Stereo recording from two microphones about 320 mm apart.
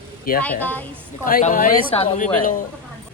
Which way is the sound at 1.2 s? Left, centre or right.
Left.